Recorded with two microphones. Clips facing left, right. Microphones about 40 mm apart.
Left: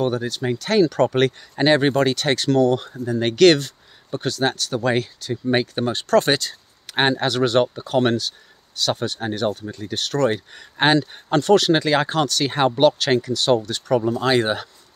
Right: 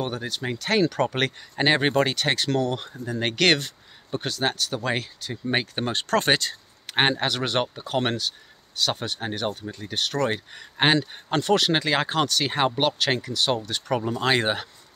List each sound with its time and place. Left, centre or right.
0.0 s speech: centre
0.6 s speech: right
1.0 s speech: centre
5.9 s speech: right
7.0 s speech: centre